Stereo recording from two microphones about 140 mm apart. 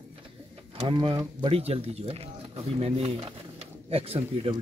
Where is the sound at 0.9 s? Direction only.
35° right (ahead or behind).